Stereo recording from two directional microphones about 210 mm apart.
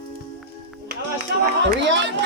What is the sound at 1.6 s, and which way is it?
Speech, 60° right (ahead or behind).